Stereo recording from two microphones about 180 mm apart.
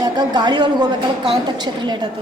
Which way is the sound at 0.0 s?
25° right (ahead or behind).